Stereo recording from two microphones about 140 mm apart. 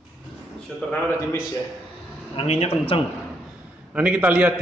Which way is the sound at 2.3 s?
50° left (ahead or behind).